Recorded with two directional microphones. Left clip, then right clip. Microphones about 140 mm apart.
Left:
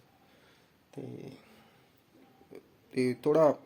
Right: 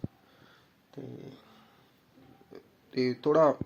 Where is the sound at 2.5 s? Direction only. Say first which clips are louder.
Right 1 dB; 15° left (ahead or behind).